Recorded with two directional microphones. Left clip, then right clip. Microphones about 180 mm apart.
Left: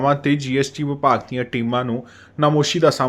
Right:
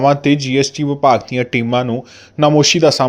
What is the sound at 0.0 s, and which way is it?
A man's voice, 20° right (ahead or behind).